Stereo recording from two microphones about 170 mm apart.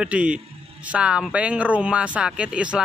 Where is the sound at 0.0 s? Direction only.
5° right (ahead or behind).